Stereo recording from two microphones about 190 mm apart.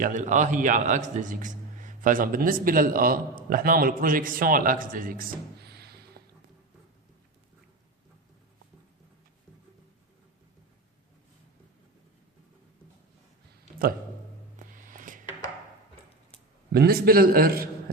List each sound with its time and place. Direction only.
0.0 s a man's voice: 40° right (ahead or behind)
14.5 s music: 45° right (ahead or behind)
16.7 s a man's voice: 55° right (ahead or behind)